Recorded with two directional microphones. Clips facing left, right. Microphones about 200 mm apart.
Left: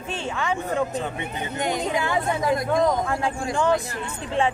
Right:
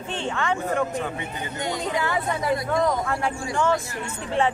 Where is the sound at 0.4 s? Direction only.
10° left (ahead or behind).